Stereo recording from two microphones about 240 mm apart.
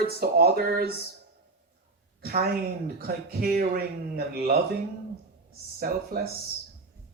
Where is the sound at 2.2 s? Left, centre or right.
Right.